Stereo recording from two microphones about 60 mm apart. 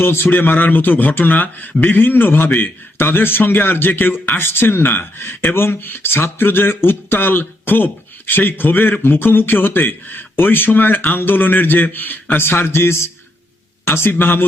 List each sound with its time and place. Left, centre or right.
0.0 s speech: left
12.4 s speech: left